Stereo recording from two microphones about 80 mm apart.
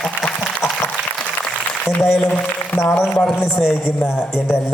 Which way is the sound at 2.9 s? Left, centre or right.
Left.